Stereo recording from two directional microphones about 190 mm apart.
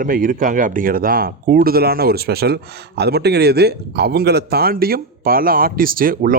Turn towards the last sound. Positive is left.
turn(degrees=-50)  # may be behind; listen again after turning